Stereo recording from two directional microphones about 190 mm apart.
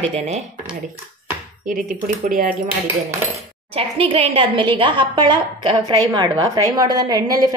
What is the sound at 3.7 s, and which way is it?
A woman's voice, 30° right (ahead or behind).